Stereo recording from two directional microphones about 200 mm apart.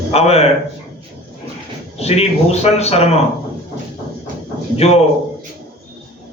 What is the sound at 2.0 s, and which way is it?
A man's voice, 30° left (ahead or behind).